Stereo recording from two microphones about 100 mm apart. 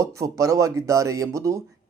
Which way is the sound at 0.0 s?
35° right (ahead or behind).